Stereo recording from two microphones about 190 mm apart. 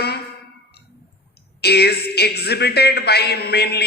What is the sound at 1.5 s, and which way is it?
Speech, 60° left (ahead or behind).